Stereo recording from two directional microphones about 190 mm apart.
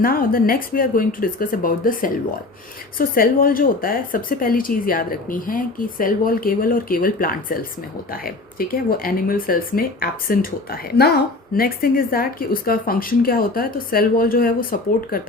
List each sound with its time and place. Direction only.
0.0 s speech: 50° left (ahead or behind)